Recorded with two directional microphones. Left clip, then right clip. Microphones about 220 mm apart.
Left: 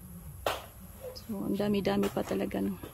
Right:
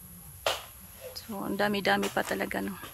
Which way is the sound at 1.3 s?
25° right (ahead or behind).